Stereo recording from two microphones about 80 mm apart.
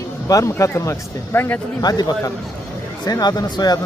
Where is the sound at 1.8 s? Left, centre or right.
Left.